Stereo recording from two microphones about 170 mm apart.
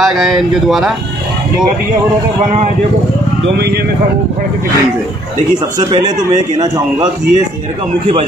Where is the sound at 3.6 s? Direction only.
70° right (ahead or behind).